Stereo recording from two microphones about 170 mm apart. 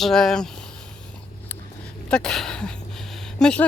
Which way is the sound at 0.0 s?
Centre (ahead or behind).